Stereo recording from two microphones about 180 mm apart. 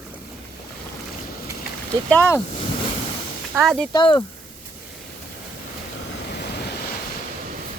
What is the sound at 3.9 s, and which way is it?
Speech, 25° left (ahead or behind).